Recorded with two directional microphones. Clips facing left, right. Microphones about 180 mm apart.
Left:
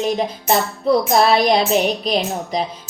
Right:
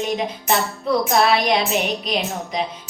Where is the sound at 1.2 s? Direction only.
35° left (ahead or behind).